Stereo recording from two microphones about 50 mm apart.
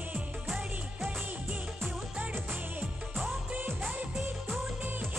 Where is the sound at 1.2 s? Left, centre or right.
Right.